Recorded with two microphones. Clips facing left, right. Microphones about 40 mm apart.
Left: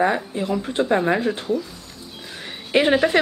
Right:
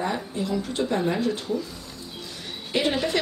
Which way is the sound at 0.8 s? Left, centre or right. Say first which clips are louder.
Left 5 dB; left.